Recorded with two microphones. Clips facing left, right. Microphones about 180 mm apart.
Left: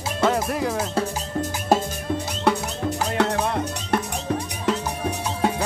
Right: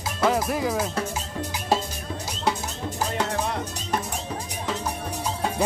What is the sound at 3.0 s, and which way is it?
Music, 65° left (ahead or behind).